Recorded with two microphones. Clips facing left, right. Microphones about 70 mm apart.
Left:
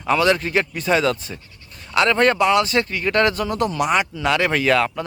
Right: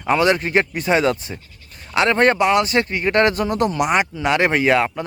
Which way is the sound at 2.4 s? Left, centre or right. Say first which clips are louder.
Even; centre.